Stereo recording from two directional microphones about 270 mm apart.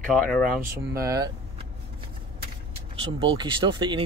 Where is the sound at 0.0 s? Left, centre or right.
Centre.